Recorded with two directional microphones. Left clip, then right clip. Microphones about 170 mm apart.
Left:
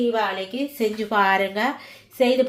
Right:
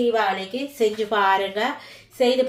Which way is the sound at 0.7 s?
55° left (ahead or behind).